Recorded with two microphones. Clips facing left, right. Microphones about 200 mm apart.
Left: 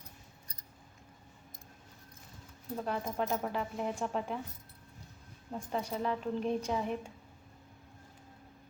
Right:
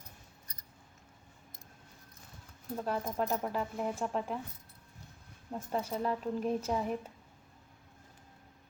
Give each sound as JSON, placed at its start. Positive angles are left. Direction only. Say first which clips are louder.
{"t": 2.8, "sound": "a woman's voice", "louder": "right 1 dB", "side_deg": 0}
{"t": 5.5, "sound": "a woman's voice", "louder": "right 1 dB", "side_deg": -5}